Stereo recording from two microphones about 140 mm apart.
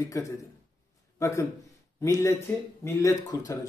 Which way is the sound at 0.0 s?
25° left (ahead or behind).